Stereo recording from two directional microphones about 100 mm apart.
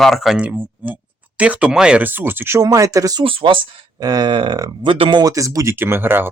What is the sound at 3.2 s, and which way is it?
Speech, 65° right (ahead or behind).